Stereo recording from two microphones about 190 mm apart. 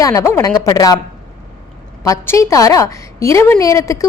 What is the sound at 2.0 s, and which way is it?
A woman's voice, 15° left (ahead or behind).